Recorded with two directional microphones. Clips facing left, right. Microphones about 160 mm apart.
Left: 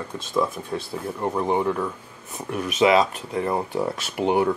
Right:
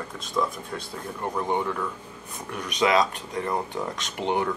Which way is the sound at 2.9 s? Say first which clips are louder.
Left 3 dB; 30° left (ahead or behind).